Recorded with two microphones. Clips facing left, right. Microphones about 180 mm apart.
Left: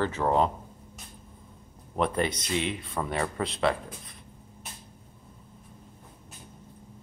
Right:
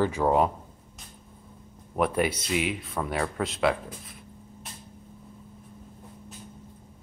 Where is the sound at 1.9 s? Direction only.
10° right (ahead or behind).